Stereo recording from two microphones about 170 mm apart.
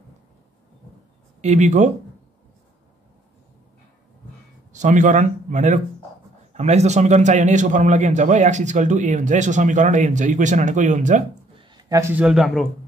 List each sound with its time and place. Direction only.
1.4 s a man's voice: 45° right (ahead or behind)
4.7 s a man's voice: 45° right (ahead or behind)
11.5 s a sound: 25° right (ahead or behind)
12.0 s speech: 10° right (ahead or behind)